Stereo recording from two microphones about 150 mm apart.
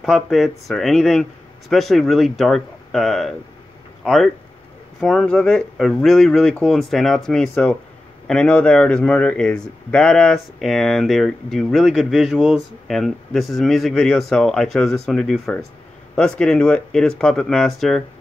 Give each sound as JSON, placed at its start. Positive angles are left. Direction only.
{"t": 0.0, "sound": "speech", "side_deg": 0}